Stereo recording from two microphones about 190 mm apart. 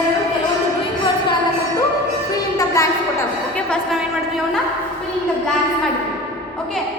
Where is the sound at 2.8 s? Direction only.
15° left (ahead or behind).